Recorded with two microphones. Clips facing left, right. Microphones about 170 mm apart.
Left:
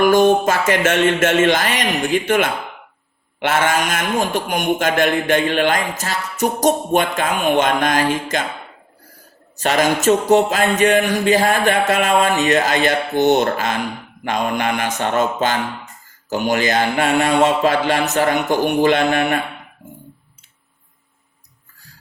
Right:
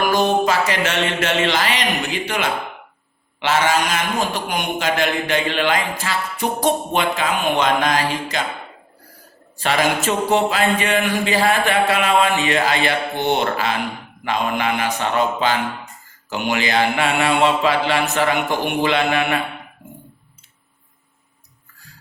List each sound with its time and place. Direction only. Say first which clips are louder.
0.0 s a man's voice: left 5 dB; 50° left (ahead or behind)
9.6 s a man's voice: left 2 dB; 45° left (ahead or behind)